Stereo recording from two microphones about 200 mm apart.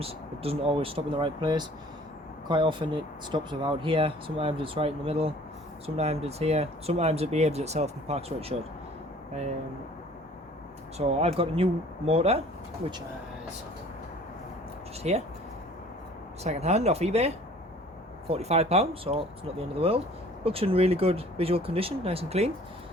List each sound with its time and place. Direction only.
0.0 s speech: 30° right (ahead or behind)
10.9 s speech: 30° right (ahead or behind)
15.1 s speech: 35° right (ahead or behind)
16.4 s speech: 35° right (ahead or behind)